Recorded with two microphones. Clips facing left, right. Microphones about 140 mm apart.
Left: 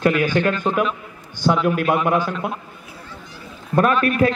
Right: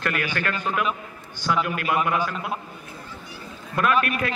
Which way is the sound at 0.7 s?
35° left (ahead or behind).